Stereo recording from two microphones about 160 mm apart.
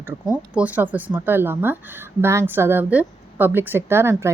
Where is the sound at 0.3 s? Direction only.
10° right (ahead or behind).